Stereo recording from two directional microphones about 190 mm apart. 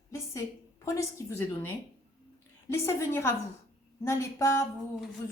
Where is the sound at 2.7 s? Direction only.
15° left (ahead or behind).